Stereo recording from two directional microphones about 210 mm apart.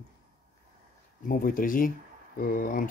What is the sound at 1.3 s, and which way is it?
Speech, 40° left (ahead or behind).